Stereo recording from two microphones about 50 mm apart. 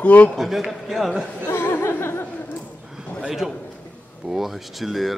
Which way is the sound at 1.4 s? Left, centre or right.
Left.